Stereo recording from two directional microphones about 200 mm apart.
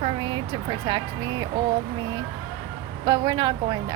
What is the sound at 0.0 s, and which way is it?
Speech, 25° right (ahead or behind).